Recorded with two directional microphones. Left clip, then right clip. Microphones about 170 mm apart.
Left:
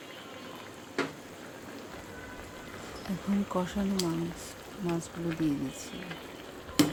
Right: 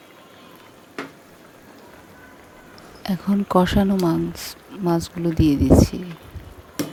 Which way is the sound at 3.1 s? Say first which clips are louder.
Right 11 dB; 50° right (ahead or behind).